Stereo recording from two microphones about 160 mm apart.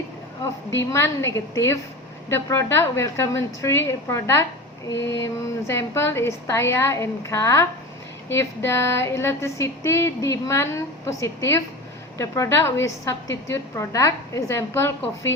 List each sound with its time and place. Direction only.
0.8 s speech: 15° left (ahead or behind)